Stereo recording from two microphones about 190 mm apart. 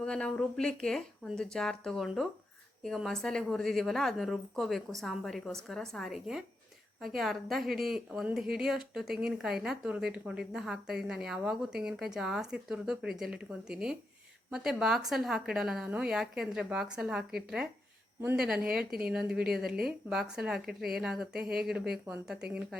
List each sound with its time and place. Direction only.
0.0 s speech: 5° left (ahead or behind)
19.0 s speech: 5° right (ahead or behind)
19.6 s speech: 50° right (ahead or behind)
20.1 s speech: 5° right (ahead or behind)